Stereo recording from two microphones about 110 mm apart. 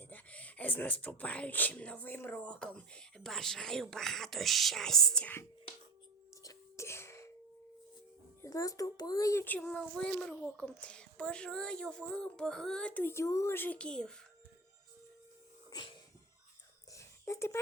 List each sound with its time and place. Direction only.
0.0 s speech: 15° left (ahead or behind)
6.4 s a sound: 30° left (ahead or behind)
8.4 s a child's voice: 30° left (ahead or behind)
9.4 s speech: 15° left (ahead or behind)
16.9 s whispering: 25° left (ahead or behind)